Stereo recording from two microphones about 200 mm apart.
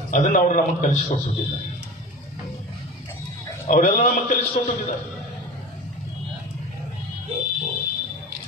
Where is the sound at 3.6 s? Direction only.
40° left (ahead or behind).